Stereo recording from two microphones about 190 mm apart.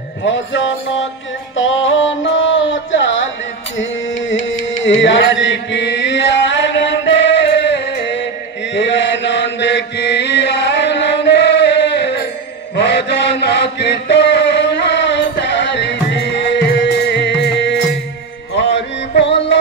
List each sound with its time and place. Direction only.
0.2 s music: 75° left (ahead or behind)
4.3 s music: 80° left
8.7 s chant: 70° left (ahead or behind)
18.5 s music: 70° left (ahead or behind)